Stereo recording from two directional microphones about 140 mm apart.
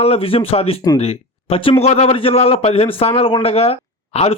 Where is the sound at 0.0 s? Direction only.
45° left (ahead or behind).